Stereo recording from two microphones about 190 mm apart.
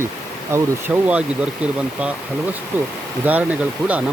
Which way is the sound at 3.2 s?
10° right (ahead or behind).